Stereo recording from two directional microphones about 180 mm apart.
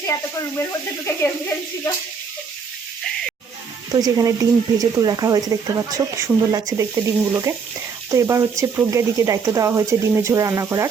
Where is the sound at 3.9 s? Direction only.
20° right (ahead or behind).